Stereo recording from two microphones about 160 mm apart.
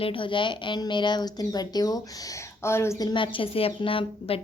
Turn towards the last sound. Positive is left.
turn(degrees=35)  # may be behind; listen again after turning